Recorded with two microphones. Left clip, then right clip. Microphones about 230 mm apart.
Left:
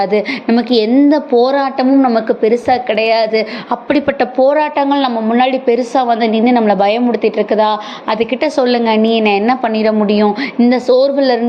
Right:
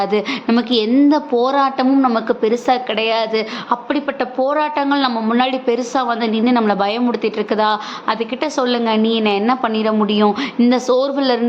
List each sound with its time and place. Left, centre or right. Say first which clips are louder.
0.0 s a woman's voice: left 4 dB; centre
3.8 s a woman's voice: left 6 dB; centre